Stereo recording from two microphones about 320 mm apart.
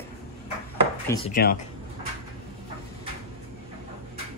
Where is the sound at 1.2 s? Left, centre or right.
Left.